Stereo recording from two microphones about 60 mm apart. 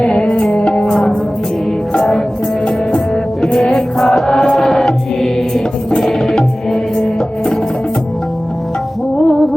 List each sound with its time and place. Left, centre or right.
0.0 s music: centre
3.4 s chant: centre
6.0 s music: centre
9.1 s music: centre